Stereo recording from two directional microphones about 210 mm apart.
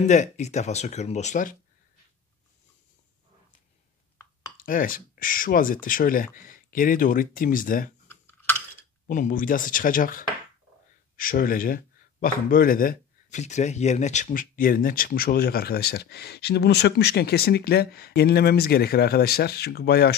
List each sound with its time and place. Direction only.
0.0 s speech: 35° left (ahead or behind)
4.6 s speech: 40° left (ahead or behind)
8.1 s a sound: 10° left (ahead or behind)
9.0 s speech: 40° left (ahead or behind)